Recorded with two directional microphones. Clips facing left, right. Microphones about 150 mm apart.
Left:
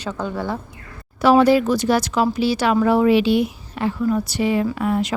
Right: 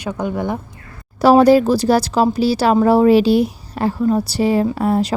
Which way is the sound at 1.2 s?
40° right (ahead or behind).